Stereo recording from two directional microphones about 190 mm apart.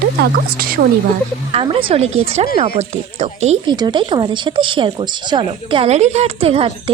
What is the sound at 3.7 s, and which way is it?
Speech, 25° right (ahead or behind).